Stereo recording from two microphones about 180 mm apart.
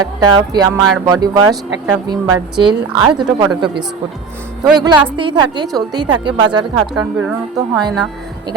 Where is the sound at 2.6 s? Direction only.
25° right (ahead or behind).